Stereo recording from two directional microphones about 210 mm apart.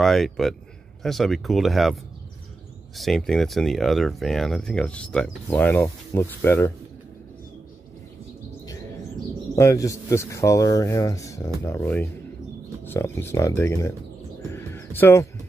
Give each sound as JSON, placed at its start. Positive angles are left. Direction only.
{"t": 0.0, "sound": "speech", "side_deg": 0}
{"t": 3.0, "sound": "speech", "side_deg": 0}
{"t": 9.6, "sound": "speech", "side_deg": 15}
{"t": 14.5, "sound": "music", "side_deg": 10}